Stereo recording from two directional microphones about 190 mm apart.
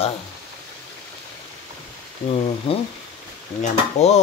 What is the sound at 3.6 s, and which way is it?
Speech, 35° left (ahead or behind).